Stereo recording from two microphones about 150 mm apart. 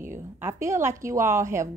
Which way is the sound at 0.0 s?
15° right (ahead or behind).